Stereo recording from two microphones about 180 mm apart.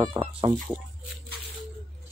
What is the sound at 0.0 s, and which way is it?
Speech, 25° right (ahead or behind).